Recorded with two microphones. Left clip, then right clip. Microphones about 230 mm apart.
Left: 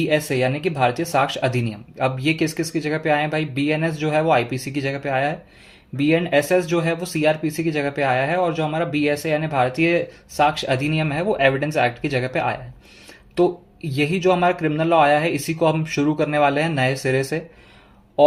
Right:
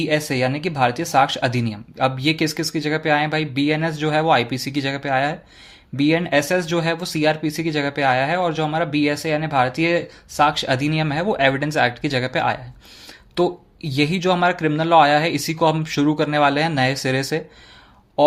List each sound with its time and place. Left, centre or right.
0.0 s speech: right